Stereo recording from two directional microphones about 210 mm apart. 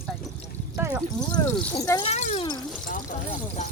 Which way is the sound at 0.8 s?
15° right (ahead or behind).